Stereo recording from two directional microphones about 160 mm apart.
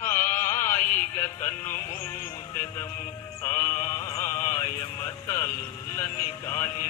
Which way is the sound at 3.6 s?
50° left (ahead or behind).